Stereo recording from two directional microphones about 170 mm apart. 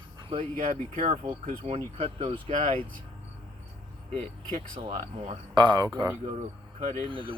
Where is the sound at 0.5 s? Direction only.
50° right (ahead or behind); by 2.4 s 35° right (ahead or behind).